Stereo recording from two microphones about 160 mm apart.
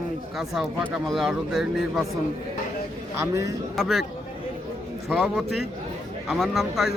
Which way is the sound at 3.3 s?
20° right (ahead or behind).